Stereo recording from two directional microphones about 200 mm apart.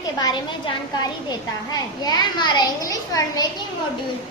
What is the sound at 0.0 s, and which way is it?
Speech, 20° left (ahead or behind).